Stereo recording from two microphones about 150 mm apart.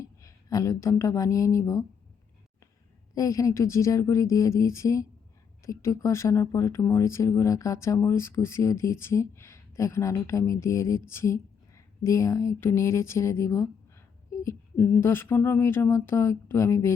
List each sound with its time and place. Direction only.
0.0 s speech: 20° left (ahead or behind)
3.2 s speech: 20° left (ahead or behind)